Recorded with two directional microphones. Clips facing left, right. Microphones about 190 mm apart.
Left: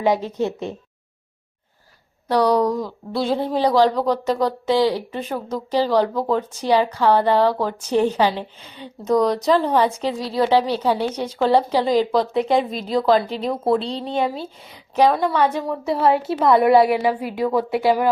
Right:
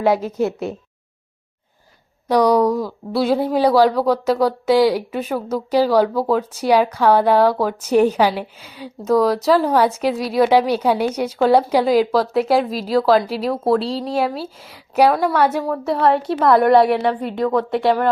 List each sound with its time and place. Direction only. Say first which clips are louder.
0.0 s a woman's voice: right 2 dB; 5° right (ahead or behind)
2.2 s a woman's voice: right 3 dB; 10° right (ahead or behind)
15.7 s speech: right 1 dB; centre (ahead or behind)